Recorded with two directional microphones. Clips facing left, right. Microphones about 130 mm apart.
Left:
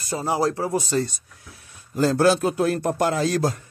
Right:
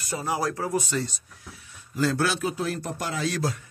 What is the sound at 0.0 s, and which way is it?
Speech, 30° left (ahead or behind).